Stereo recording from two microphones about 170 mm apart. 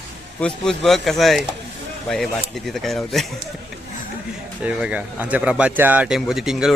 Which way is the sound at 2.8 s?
Centre (ahead or behind).